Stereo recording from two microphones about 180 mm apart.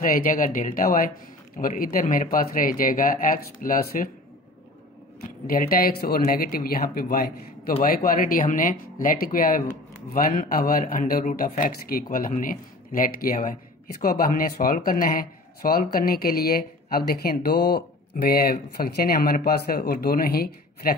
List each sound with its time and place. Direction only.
0.0 s speech: 50° left (ahead or behind)
5.5 s speech: 55° left (ahead or behind)